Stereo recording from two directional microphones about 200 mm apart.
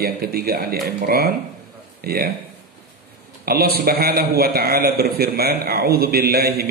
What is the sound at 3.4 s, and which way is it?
A man's voice, 50° right (ahead or behind).